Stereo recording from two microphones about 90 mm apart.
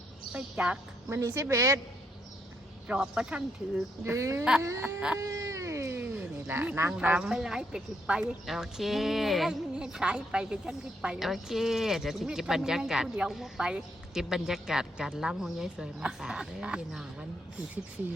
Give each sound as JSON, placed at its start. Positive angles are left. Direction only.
{"t": 0.3, "sound": "a woman's voice", "side_deg": -15}
{"t": 1.1, "sound": "speech", "side_deg": -35}
{"t": 2.8, "sound": "speech", "side_deg": -10}
{"t": 4.0, "sound": "speech", "side_deg": -30}
{"t": 4.9, "sound": "speech", "side_deg": -15}
{"t": 5.2, "sound": "cat", "side_deg": -35}
{"t": 6.0, "sound": "a sound", "side_deg": -20}
{"t": 6.9, "sound": "speech", "side_deg": -10}